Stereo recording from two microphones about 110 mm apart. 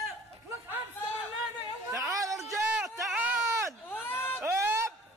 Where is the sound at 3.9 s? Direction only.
20° left (ahead or behind).